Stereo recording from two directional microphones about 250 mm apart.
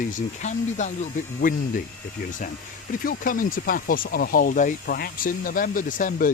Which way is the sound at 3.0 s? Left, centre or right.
Left.